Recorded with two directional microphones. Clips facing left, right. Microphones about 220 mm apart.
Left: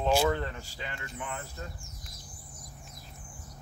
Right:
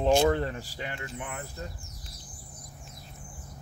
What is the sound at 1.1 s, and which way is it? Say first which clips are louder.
Speech: right 1 dB; 20° right (ahead or behind).